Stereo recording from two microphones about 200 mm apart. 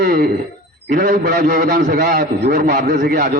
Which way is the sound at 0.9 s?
40° right (ahead or behind).